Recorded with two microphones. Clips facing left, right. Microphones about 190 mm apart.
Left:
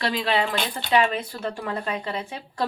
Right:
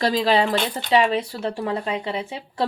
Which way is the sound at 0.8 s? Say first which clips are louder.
Right 2 dB; 25° right (ahead or behind).